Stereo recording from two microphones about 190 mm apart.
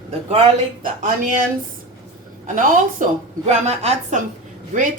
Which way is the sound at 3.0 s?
45° right (ahead or behind).